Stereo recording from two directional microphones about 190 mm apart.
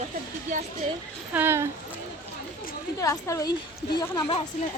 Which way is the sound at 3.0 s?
15° left (ahead or behind).